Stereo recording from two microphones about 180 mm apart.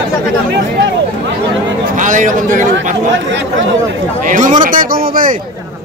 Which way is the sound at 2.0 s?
45° right (ahead or behind).